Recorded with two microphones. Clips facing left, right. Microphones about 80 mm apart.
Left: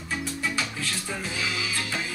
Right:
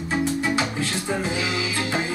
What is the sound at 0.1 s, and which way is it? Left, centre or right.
Music, right.